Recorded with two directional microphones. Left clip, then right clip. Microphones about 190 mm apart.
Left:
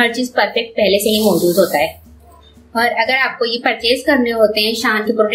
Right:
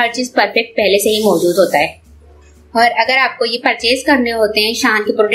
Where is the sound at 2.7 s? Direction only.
15° right (ahead or behind).